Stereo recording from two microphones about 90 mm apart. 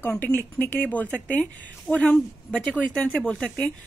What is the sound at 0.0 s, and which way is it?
A woman's voice, 25° left (ahead or behind).